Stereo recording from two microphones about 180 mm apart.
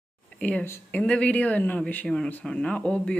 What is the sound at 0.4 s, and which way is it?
Speech, 5° left (ahead or behind).